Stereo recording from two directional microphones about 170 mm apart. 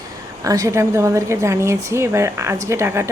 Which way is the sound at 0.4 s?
20° right (ahead or behind).